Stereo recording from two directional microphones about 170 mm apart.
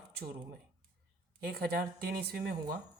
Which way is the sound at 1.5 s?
65° right (ahead or behind).